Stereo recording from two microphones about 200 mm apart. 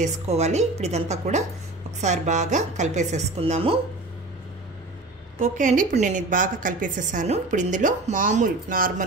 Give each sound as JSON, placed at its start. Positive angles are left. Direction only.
{"t": 0.0, "sound": "a woman's voice", "side_deg": -35}
{"t": 5.4, "sound": "a woman's voice", "side_deg": -40}